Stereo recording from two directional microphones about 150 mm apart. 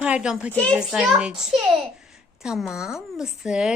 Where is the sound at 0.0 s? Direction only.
5° right (ahead or behind).